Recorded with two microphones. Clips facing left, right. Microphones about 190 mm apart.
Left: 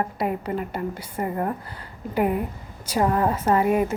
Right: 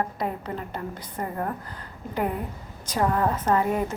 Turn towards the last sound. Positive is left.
turn(degrees=10)  # may be behind; listen again after turning